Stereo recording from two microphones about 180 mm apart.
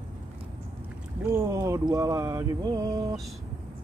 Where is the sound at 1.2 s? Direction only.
15° right (ahead or behind).